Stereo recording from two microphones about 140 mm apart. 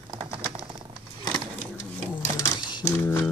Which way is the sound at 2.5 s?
30° left (ahead or behind).